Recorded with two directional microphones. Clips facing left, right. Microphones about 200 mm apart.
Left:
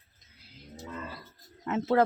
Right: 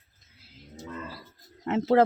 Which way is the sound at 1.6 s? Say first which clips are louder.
Right 4 dB; 30° right (ahead or behind).